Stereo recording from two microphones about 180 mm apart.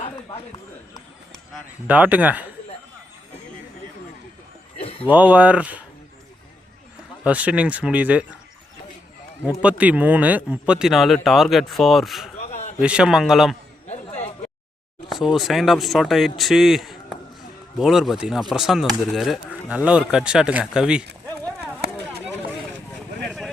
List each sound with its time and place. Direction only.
1.5 s speech: 10° right (ahead or behind)
4.8 s a sound: 30° left (ahead or behind)
5.0 s speech: 10° right (ahead or behind)
7.3 s speech: 5° right (ahead or behind)
9.6 s speech: 5° right (ahead or behind)
12.4 s a sound: 40° left (ahead or behind)
12.8 s speech: 5° right (ahead or behind)
13.8 s a sound: 40° left (ahead or behind)
15.1 s speech: centre (ahead or behind)
21.2 s clip-clop: 5° left (ahead or behind)